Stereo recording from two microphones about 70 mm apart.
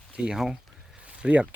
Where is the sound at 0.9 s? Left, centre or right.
Centre.